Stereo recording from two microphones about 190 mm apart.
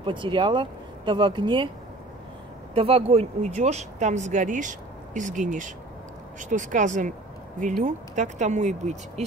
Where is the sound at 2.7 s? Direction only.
30° right (ahead or behind).